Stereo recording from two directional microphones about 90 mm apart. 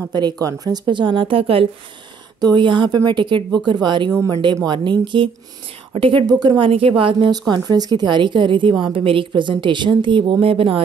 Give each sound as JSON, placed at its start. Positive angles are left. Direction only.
{"t": 0.1, "sound": "speech", "side_deg": -50}
{"t": 0.8, "sound": "a woman's voice", "side_deg": -60}
{"t": 2.4, "sound": "a woman's voice", "side_deg": -60}
{"t": 5.9, "sound": "a woman's voice", "side_deg": -80}
{"t": 6.2, "sound": "speech", "side_deg": -55}
{"t": 6.7, "sound": "speech", "side_deg": -90}
{"t": 7.2, "sound": "a woman's voice", "side_deg": -50}